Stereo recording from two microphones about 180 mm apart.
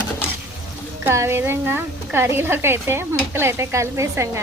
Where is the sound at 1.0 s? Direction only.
15° right (ahead or behind).